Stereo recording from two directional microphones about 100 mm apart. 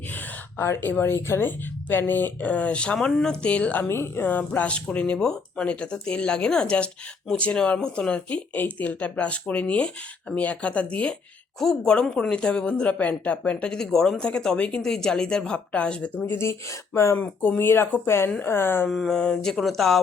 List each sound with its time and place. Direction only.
0.1 s speech: 20° left (ahead or behind)
16.2 s speech: 25° left (ahead or behind)
17.2 s speech: 15° left (ahead or behind)
18.9 s mantra: 5° left (ahead or behind)